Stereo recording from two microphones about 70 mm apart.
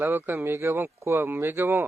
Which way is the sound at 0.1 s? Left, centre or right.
Right.